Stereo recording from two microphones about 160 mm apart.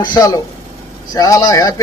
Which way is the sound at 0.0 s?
25° left (ahead or behind).